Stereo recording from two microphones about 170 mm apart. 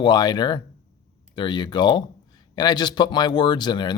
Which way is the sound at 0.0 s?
25° left (ahead or behind).